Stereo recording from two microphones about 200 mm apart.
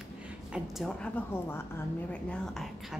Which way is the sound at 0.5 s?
Centre (ahead or behind).